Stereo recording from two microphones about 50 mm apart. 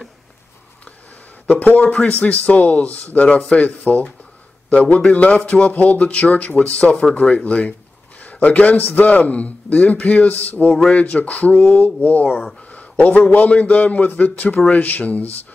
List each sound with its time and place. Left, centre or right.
1.5 s a man's voice: left
12.7 s a sound: left
13.3 s a man's voice: left